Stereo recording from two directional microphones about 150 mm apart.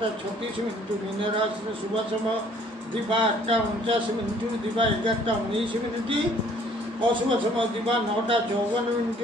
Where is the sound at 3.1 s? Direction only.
35° right (ahead or behind).